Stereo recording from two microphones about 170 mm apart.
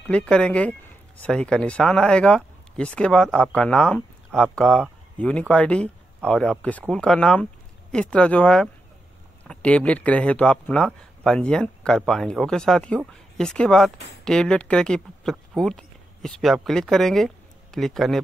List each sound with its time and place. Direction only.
0.0 s speech: 5° left (ahead or behind)